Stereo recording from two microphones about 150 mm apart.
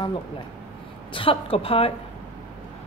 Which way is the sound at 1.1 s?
40° left (ahead or behind).